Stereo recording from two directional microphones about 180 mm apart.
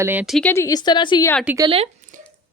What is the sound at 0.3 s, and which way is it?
Speech, 10° left (ahead or behind).